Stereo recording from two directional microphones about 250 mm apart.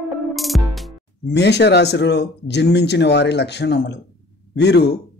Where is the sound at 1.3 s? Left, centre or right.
Left.